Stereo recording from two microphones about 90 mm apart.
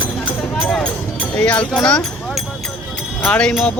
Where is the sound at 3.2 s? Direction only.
10° left (ahead or behind).